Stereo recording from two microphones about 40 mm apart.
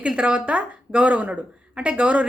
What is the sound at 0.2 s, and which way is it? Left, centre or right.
A woman's voice, right.